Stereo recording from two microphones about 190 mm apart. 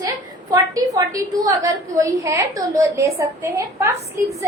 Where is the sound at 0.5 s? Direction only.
20° right (ahead or behind).